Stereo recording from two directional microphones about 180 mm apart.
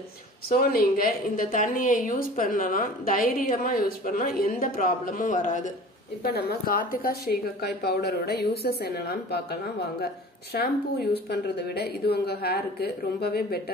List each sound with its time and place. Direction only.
0.5 s a woman's voice: 55° left (ahead or behind)
6.2 s a woman's voice: 55° left (ahead or behind)